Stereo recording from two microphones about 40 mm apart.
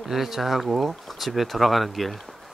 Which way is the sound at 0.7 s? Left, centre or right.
Centre.